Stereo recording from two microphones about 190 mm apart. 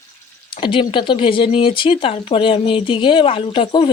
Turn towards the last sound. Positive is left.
turn(degrees=25)  # may be behind; listen again after turning